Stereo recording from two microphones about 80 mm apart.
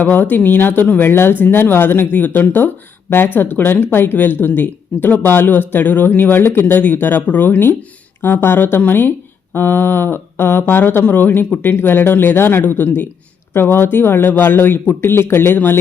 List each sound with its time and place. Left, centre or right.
0.0 s speech: left